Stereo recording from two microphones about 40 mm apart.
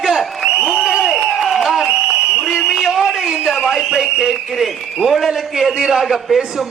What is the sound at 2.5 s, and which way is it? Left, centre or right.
A man's voice, centre.